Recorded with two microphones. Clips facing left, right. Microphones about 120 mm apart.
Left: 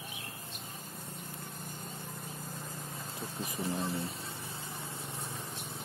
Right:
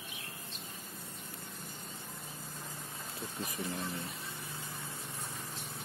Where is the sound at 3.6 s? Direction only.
30° left (ahead or behind).